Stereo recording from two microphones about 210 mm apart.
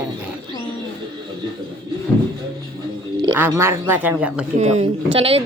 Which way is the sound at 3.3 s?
10° right (ahead or behind).